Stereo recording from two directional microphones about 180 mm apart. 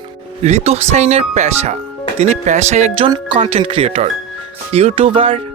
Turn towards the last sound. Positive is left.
turn(degrees=-30)  # may be behind; listen again after turning